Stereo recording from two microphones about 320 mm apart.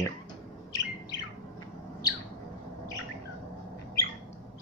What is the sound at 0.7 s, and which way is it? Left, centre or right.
Chirp, centre.